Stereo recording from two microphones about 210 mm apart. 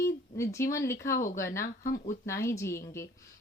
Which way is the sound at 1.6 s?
40° left (ahead or behind).